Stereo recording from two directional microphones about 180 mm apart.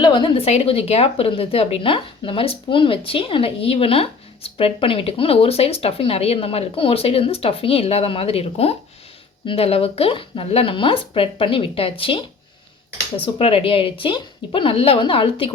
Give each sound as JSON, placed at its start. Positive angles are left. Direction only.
{"t": 0.0, "sound": "a woman's voice", "side_deg": 25}
{"t": 13.2, "sound": "a woman's voice", "side_deg": 30}